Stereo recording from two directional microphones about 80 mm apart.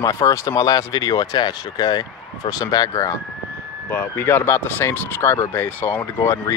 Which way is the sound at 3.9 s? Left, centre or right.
Left.